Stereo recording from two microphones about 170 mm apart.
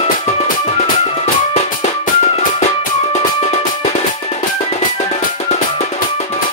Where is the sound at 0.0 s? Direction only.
35° left (ahead or behind).